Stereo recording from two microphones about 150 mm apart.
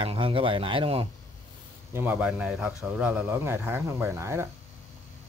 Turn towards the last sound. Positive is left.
turn(degrees=-20)  # may be behind; listen again after turning